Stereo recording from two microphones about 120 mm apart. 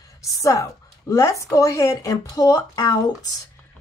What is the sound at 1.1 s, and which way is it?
Speech, 25° left (ahead or behind).